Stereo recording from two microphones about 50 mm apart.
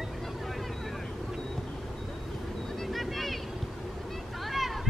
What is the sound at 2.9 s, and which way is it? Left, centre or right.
Vehicle, centre.